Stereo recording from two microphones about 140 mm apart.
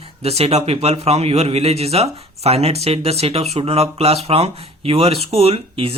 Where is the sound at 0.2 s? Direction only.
45° right (ahead or behind).